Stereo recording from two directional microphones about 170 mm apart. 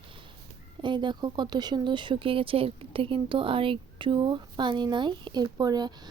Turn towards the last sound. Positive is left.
turn(degrees=-25)  # may be behind; listen again after turning